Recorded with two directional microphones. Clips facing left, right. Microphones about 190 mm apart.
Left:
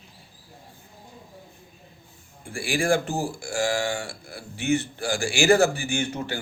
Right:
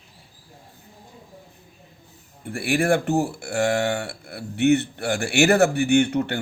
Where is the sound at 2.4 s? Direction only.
60° right (ahead or behind).